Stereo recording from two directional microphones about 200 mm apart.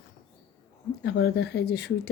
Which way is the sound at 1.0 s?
55° left (ahead or behind).